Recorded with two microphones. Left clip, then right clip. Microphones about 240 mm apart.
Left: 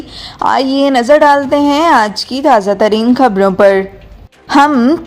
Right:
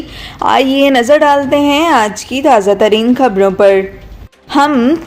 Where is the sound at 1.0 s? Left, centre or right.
Left.